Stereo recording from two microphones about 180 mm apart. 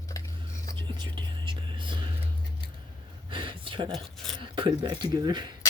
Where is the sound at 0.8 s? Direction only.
25° right (ahead or behind).